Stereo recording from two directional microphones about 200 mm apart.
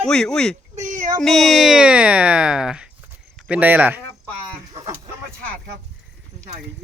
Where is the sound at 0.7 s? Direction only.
40° right (ahead or behind).